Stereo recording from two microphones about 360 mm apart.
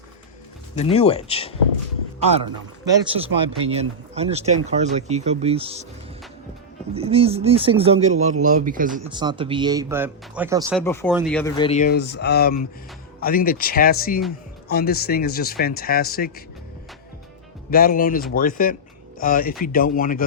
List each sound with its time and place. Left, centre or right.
0.9 s speech: centre
3.0 s speech: centre
6.9 s speech: centre
10.8 s speech: centre; by 16.3 s left
17.7 s speech: left